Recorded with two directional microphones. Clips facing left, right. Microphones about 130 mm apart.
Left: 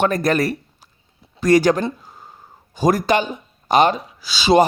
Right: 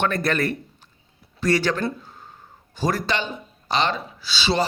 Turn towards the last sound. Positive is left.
turn(degrees=40)  # may be behind; listen again after turning